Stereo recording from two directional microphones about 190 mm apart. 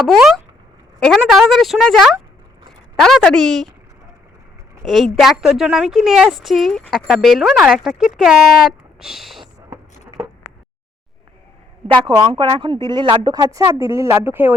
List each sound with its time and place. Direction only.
0.0 s a woman's voice: centre (ahead or behind)
4.8 s a woman's voice: centre (ahead or behind)
11.9 s speech: 25° right (ahead or behind); by 14.5 s 10° right (ahead or behind)